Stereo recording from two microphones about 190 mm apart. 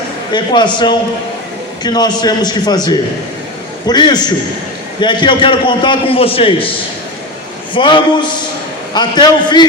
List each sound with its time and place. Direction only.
0.3 s a man's voice: 25° left (ahead or behind)
7.7 s a man's voice: 25° left (ahead or behind)